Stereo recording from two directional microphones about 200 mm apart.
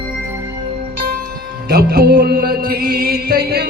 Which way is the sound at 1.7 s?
50° right (ahead or behind).